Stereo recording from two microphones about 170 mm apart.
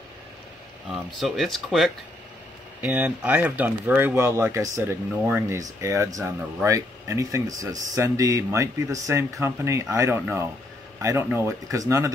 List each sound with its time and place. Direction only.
0.9 s speech: centre (ahead or behind); by 12.1 s 15° right (ahead or behind)